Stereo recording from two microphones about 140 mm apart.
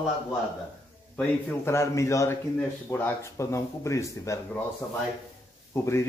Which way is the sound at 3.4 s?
20° left (ahead or behind).